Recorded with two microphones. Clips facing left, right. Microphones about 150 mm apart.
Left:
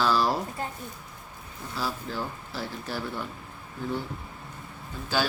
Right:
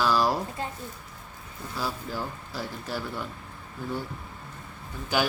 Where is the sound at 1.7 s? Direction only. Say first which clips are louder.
Even; 15° right (ahead or behind).